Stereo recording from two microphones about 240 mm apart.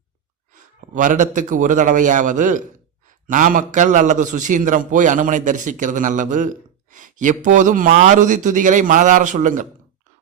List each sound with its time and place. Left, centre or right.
0.5 s a man's voice: right